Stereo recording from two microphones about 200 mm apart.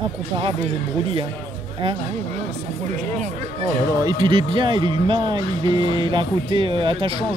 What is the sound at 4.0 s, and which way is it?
Speech, 20° right (ahead or behind).